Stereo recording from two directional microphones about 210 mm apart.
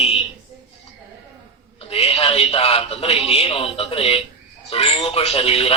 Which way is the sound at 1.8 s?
25° left (ahead or behind).